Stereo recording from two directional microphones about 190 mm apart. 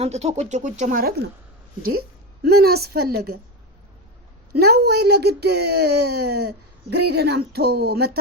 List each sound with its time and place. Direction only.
0.0 s speech: 35° right (ahead or behind); by 3.3 s 55° right (ahead or behind)
4.5 s speech: 55° right (ahead or behind)